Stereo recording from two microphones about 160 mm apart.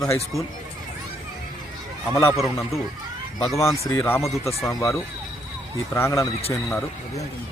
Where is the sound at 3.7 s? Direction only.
15° left (ahead or behind).